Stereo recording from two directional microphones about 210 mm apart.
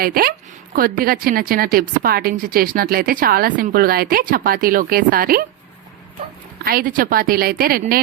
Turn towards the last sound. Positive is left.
turn(degrees=-45)  # may be behind; listen again after turning